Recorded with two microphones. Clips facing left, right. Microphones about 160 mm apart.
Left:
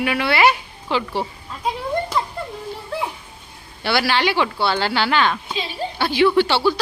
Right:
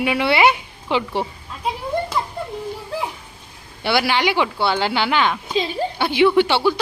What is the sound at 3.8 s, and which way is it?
Speech, 20° right (ahead or behind).